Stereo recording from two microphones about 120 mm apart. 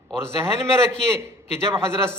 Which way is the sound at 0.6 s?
20° right (ahead or behind).